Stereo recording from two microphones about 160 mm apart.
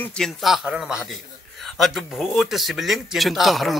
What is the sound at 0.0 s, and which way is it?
Speech, 5° left (ahead or behind).